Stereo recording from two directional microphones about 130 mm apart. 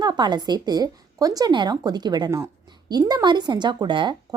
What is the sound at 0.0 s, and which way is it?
Speech, 35° right (ahead or behind).